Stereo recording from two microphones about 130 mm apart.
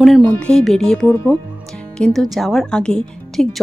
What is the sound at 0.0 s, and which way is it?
Speech, 5° left (ahead or behind).